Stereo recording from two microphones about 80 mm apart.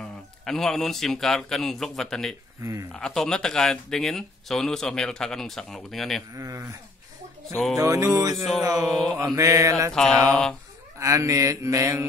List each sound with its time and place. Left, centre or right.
0.0 s speech: centre
2.6 s mantra: right
2.9 s speech: centre
6.3 s mantra: right
7.8 s mantra: right
8.7 s mantra: centre
9.3 s mantra: right
10.2 s speech: centre
11.0 s mantra: right